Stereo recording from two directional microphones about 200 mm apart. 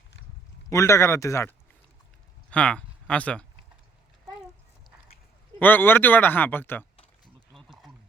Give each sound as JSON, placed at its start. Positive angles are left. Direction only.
{"t": 0.7, "sound": "speech", "side_deg": 15}
{"t": 5.5, "sound": "speech", "side_deg": 10}
{"t": 7.5, "sound": "a sound", "side_deg": 0}